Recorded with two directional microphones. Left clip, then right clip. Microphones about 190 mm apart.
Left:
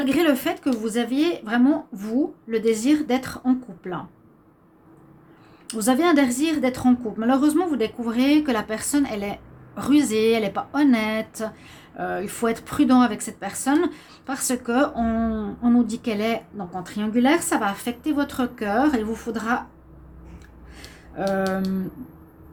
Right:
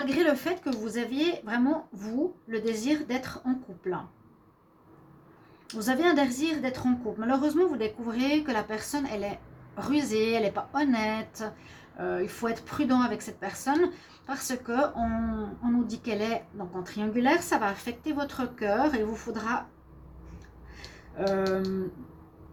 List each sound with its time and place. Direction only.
0.0 s a woman's voice: 50° left (ahead or behind)
5.6 s a woman's voice: 45° left (ahead or behind)
20.7 s a sound: 45° left (ahead or behind)